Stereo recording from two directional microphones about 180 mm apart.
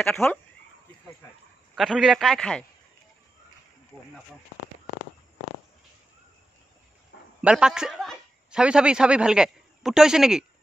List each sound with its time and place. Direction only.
0.0 s a man's voice: 5° left (ahead or behind)
1.8 s a man's voice: centre (ahead or behind)
7.1 s a sound: 65° left (ahead or behind)
7.4 s a man's voice: 5° right (ahead or behind)